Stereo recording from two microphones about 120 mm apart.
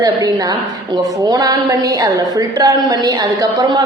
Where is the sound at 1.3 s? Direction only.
30° right (ahead or behind).